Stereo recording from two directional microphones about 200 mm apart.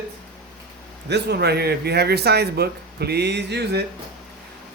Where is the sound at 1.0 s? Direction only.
55° right (ahead or behind).